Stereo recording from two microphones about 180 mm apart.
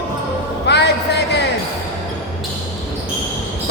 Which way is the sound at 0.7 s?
70° left (ahead or behind).